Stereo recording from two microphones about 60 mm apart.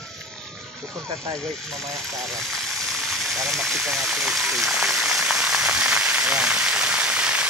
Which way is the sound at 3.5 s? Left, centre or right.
Centre.